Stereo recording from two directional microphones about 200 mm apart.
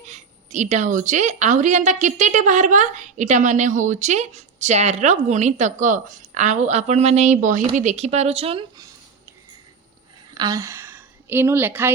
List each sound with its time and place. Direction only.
0.1 s a woman's voice: 35° right (ahead or behind)
10.3 s speech: 20° right (ahead or behind)